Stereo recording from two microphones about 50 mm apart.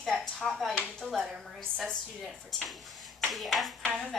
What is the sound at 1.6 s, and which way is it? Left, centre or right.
A woman's voice, centre.